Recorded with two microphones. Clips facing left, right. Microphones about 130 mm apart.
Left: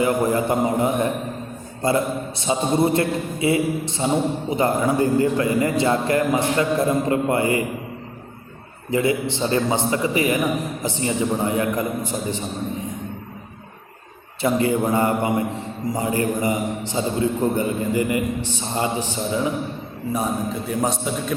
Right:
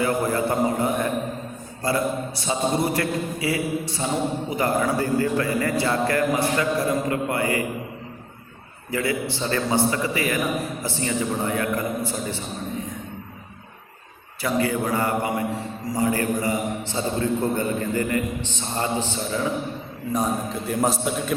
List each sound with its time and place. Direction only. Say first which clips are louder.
0.0 s a man's voice: left 3 dB; 20° left (ahead or behind)
8.9 s a man's voice: left 5 dB; 20° left (ahead or behind)
14.4 s a man's voice: left 4 dB; 25° left (ahead or behind)
20.1 s a man's voice: even; centre (ahead or behind)